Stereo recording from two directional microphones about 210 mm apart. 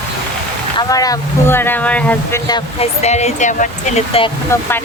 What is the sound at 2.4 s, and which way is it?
Speech, 20° left (ahead or behind).